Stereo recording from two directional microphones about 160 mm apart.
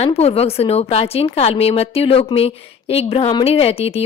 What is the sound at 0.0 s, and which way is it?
Speech, 40° left (ahead or behind).